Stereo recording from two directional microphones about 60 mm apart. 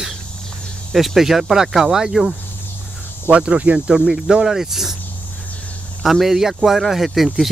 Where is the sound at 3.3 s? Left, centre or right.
Right.